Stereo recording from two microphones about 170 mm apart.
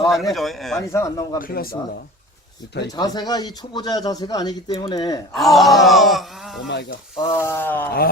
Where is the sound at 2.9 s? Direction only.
25° left (ahead or behind).